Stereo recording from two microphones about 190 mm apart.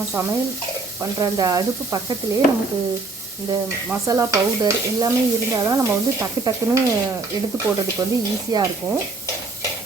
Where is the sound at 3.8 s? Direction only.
15° right (ahead or behind).